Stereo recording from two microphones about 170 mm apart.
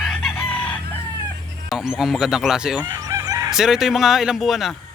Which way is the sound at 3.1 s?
20° right (ahead or behind).